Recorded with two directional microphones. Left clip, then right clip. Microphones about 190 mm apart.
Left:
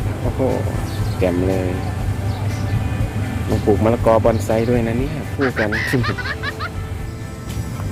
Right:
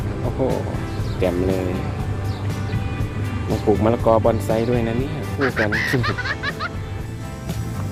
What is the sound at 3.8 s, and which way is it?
Speech, 15° right (ahead or behind).